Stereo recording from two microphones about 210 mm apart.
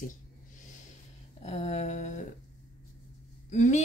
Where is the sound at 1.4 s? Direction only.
35° left (ahead or behind).